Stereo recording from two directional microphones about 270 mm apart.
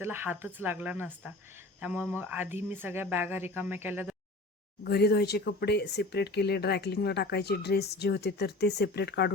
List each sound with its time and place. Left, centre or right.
0.0 s speech: centre
4.8 s speech: left